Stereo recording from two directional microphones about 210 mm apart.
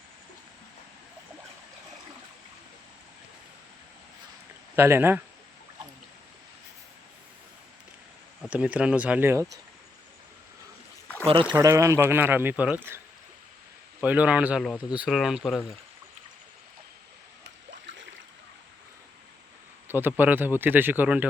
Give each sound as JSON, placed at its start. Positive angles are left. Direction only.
{"t": 4.7, "sound": "speech", "side_deg": -10}
{"t": 8.4, "sound": "speech", "side_deg": -5}
{"t": 11.3, "sound": "speech", "side_deg": -25}
{"t": 11.5, "sound": "speech", "side_deg": -15}
{"t": 14.0, "sound": "speech", "side_deg": -5}
{"t": 19.9, "sound": "speech", "side_deg": -10}